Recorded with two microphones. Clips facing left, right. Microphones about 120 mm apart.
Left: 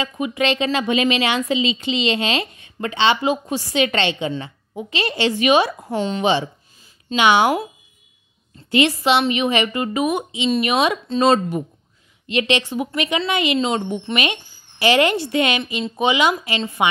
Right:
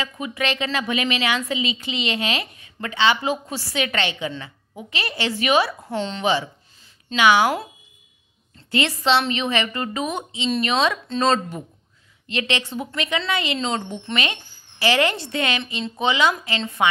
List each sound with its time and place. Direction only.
0.0 s a woman's voice: 20° left (ahead or behind)